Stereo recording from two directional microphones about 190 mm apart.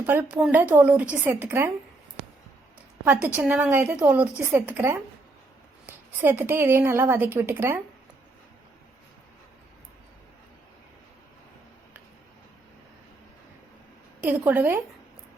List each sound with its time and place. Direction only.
0.0 s speech: 10° right (ahead or behind)
3.0 s speech: 10° right (ahead or behind)
5.8 s a sound: 10° right (ahead or behind)
6.6 s speech: 15° right (ahead or behind)
14.2 s a woman's voice: 10° right (ahead or behind)